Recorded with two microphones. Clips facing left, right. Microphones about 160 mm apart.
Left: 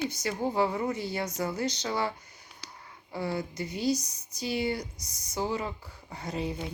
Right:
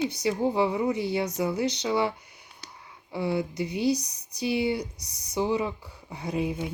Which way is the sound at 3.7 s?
65° right (ahead or behind).